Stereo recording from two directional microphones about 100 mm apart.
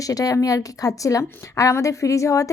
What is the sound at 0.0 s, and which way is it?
A woman's voice, 35° left (ahead or behind).